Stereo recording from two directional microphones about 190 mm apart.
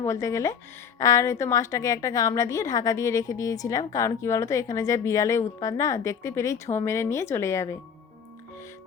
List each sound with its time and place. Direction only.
0.0 s a woman's voice: 15° left (ahead or behind)